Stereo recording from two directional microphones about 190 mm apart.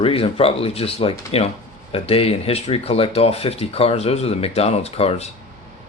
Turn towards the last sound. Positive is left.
turn(degrees=35)  # may be behind; listen again after turning